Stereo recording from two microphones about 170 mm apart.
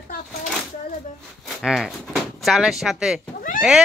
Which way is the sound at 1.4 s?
Centre (ahead or behind).